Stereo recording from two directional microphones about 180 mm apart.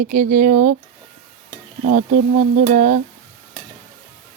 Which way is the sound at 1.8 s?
45° right (ahead or behind).